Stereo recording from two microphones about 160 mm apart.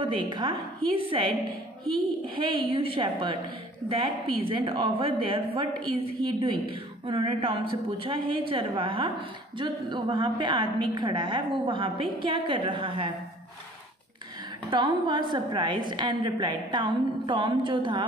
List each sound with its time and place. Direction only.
0.0 s a woman's voice: 30° right (ahead or behind)
2.3 s a woman's voice: 30° right (ahead or behind)
14.7 s a woman's voice: 30° right (ahead or behind)